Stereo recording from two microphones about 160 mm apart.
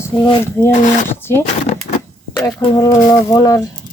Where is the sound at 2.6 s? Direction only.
25° left (ahead or behind).